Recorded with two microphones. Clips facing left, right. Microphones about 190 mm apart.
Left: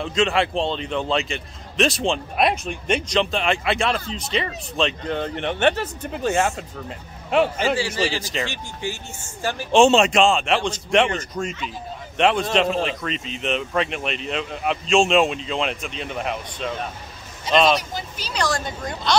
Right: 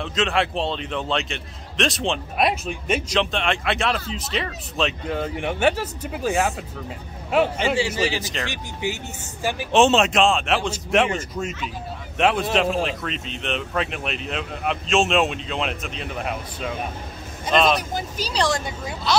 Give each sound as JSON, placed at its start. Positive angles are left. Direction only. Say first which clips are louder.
{"t": 0.0, "sound": "a man's voice", "louder": "left 2 dB", "side_deg": 0}
{"t": 7.9, "sound": "speech", "louder": "even", "side_deg": -15}
{"t": 9.8, "sound": "a man's voice", "louder": "left 2 dB", "side_deg": 0}
{"t": 17.9, "sound": "speech", "louder": "right 4 dB", "side_deg": -40}
{"t": 18.6, "sound": "speech", "louder": "left 1 dB", "side_deg": -5}